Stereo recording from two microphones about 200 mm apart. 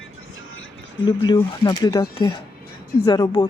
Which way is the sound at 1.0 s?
25° left (ahead or behind).